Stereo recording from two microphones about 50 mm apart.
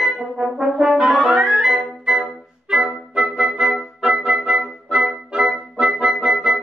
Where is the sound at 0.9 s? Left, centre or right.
Centre.